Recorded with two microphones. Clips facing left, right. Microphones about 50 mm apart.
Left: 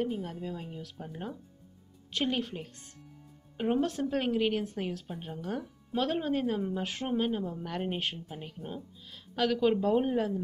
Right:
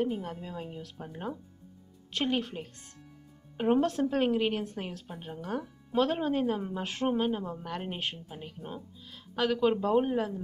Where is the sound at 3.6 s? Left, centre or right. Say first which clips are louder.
Right 3 dB; centre.